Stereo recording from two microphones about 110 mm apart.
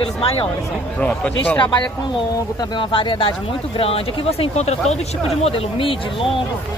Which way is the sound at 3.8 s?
65° left (ahead or behind).